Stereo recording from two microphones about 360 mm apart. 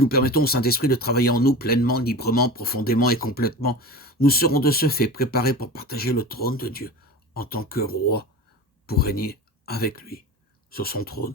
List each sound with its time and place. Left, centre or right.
0.0 s speech: left